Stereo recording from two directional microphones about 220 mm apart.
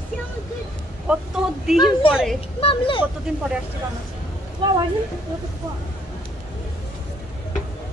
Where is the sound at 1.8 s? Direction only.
20° left (ahead or behind).